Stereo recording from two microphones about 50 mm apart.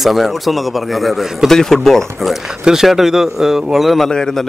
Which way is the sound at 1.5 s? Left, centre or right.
Centre.